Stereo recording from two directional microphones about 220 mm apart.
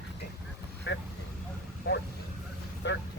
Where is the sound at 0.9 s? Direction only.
55° left (ahead or behind).